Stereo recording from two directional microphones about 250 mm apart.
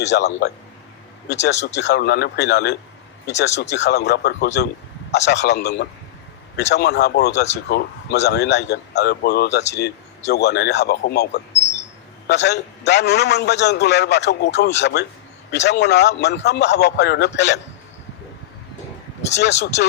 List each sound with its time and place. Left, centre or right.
0.0 s a man's voice: left
1.3 s a man's voice: left
19.3 s a man's voice: left